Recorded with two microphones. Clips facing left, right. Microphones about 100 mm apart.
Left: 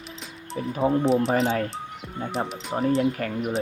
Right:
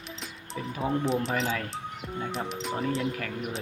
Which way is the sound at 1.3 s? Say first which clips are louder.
Left 7 dB; 35° left (ahead or behind).